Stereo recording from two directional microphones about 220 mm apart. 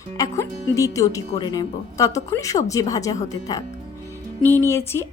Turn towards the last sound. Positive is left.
turn(degrees=10)  # may be behind; listen again after turning